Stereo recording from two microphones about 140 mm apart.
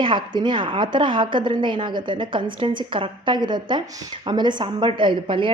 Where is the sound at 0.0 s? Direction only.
35° right (ahead or behind).